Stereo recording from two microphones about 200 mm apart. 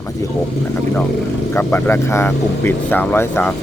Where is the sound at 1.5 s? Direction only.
10° left (ahead or behind).